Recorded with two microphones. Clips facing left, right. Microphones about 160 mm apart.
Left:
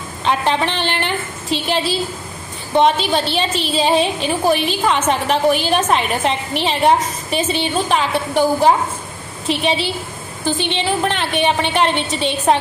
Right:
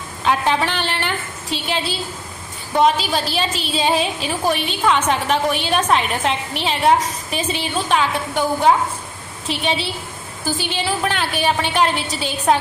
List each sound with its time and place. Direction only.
0.6 s a sound: centre (ahead or behind)
2.8 s a woman's voice: centre (ahead or behind)
8.1 s a woman's voice: 30° left (ahead or behind)
9.5 s a woman's voice: centre (ahead or behind)